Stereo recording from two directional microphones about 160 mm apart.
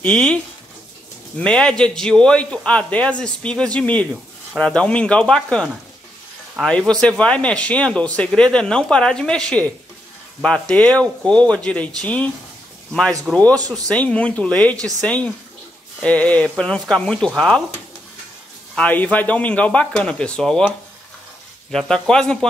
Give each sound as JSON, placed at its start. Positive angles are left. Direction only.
{"t": 0.0, "sound": "speech", "side_deg": 5}
{"t": 1.4, "sound": "a man's voice", "side_deg": 5}
{"t": 13.6, "sound": "speech", "side_deg": -25}
{"t": 13.8, "sound": "a man's voice", "side_deg": 5}
{"t": 18.8, "sound": "a man's voice", "side_deg": 10}
{"t": 21.7, "sound": "speech", "side_deg": 5}